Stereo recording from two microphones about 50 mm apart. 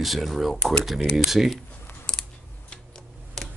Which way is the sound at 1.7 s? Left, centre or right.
Left.